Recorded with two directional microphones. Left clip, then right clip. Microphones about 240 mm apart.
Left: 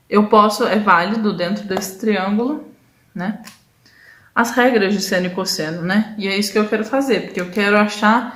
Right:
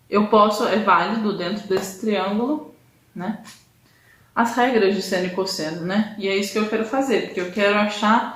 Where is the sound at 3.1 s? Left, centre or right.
Left.